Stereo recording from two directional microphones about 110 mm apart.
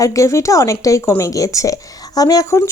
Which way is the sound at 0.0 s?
30° left (ahead or behind).